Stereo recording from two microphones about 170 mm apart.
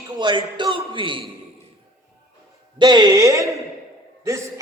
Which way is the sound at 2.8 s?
25° right (ahead or behind).